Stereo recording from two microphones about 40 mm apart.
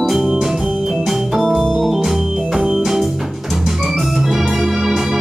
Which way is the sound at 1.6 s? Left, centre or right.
Centre.